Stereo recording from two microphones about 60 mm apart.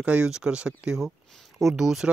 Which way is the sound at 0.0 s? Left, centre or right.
Centre.